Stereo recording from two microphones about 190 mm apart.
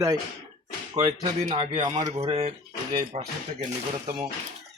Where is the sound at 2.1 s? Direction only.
30° right (ahead or behind).